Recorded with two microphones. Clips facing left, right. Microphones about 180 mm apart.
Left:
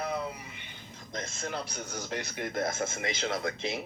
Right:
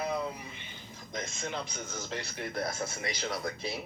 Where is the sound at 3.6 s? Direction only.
20° left (ahead or behind).